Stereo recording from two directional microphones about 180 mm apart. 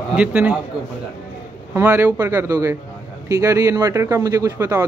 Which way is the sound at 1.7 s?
10° right (ahead or behind).